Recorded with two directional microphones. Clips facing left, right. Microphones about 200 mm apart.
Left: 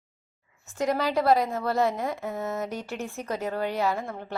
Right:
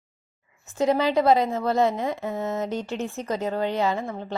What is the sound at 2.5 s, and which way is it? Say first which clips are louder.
Speech: right 4 dB; 20° right (ahead or behind).